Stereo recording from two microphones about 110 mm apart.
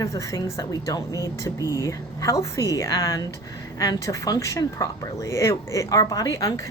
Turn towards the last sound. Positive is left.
turn(degrees=30)  # may be behind; listen again after turning